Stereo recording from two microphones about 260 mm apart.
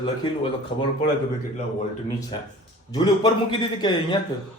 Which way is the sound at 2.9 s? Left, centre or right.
Centre.